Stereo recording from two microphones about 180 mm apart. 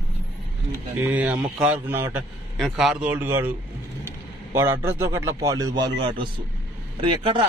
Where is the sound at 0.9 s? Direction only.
10° right (ahead or behind).